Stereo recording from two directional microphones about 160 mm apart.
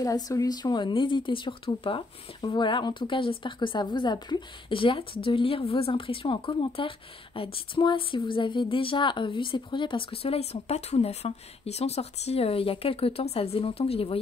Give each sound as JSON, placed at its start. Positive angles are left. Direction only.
{"t": 0.0, "sound": "speech", "side_deg": 20}